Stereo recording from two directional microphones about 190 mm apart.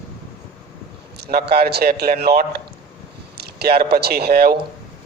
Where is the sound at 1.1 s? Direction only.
60° right (ahead or behind).